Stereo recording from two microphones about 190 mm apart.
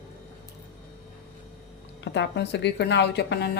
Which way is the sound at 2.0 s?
65° left (ahead or behind).